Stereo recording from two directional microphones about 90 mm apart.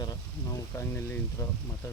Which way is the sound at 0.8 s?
25° left (ahead or behind).